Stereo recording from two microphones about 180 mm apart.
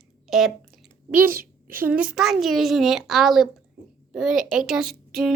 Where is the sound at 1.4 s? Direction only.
55° right (ahead or behind).